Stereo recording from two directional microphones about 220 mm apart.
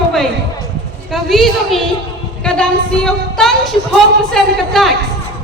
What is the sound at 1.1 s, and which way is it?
A woman's voice, centre (ahead or behind).